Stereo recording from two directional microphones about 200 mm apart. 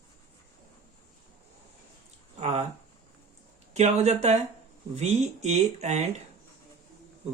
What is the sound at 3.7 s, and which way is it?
Speech, 35° right (ahead or behind).